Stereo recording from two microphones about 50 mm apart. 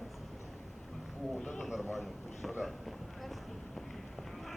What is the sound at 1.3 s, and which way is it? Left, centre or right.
Speech, centre.